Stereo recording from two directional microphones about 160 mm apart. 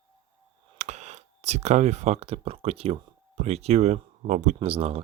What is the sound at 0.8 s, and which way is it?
Speech, 45° right (ahead or behind).